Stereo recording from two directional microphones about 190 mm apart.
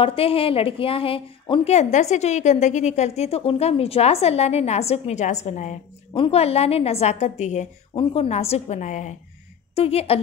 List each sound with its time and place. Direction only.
0.0 s a woman's voice: 30° left (ahead or behind)